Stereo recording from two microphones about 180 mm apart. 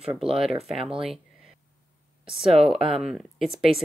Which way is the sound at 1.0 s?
Centre (ahead or behind).